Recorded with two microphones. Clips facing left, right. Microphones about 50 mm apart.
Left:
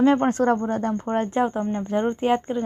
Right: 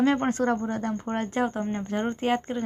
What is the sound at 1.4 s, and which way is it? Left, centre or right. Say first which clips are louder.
Speech: left 4 dB; centre.